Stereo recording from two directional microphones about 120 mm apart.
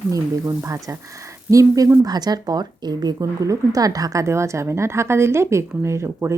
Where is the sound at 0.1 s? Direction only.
30° right (ahead or behind).